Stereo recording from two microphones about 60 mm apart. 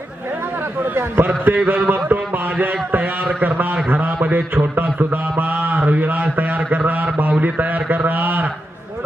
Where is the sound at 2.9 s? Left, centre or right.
Right.